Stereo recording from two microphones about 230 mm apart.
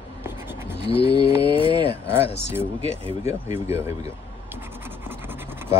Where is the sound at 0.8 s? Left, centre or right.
Left.